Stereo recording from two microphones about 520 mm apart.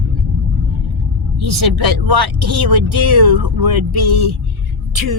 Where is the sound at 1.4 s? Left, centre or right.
Right.